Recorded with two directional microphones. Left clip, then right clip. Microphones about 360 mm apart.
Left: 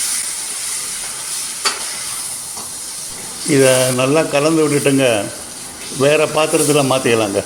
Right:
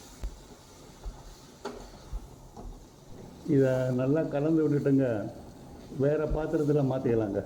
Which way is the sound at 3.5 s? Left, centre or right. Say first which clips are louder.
Left 13 dB; right.